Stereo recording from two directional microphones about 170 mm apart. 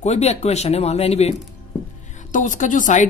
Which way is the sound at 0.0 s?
40° left (ahead or behind).